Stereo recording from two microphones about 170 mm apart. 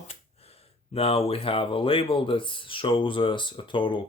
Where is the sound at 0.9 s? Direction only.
35° left (ahead or behind).